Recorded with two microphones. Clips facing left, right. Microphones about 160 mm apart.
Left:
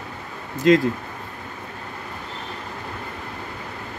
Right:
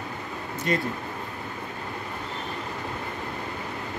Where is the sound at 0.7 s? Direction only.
90° left.